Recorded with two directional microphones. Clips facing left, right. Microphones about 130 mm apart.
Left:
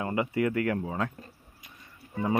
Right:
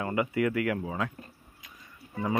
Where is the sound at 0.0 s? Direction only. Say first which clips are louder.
Even; 25° left (ahead or behind).